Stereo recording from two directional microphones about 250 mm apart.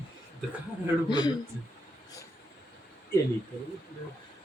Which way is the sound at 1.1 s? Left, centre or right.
Centre.